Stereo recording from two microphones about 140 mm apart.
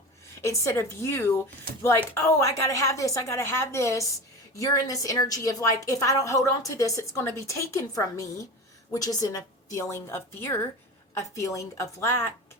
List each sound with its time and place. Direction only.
0.4 s a woman's voice: 20° left (ahead or behind)